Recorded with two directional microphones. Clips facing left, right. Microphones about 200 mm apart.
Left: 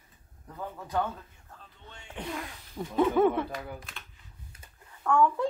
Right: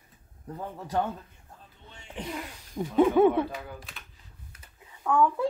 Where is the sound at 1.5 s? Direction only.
10° right (ahead or behind).